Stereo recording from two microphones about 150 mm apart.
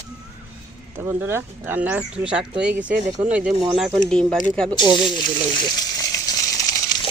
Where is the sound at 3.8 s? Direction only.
Centre (ahead or behind).